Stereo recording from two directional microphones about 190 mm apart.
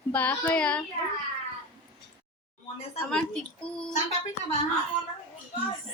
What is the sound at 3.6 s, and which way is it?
Speech, 5° left (ahead or behind).